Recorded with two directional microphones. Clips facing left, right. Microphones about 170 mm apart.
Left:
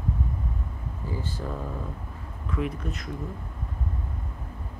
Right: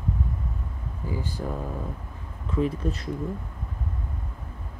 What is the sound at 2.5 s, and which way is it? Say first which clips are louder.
Speech: right 5 dB; 30° right (ahead or behind).